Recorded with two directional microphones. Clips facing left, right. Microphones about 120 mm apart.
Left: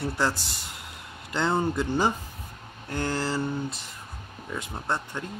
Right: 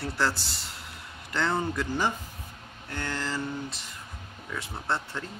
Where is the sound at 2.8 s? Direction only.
35° left (ahead or behind).